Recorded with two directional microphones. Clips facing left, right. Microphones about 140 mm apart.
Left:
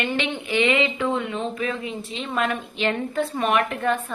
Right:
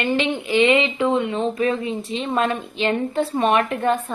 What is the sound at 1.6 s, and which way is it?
A woman's voice, 35° right (ahead or behind).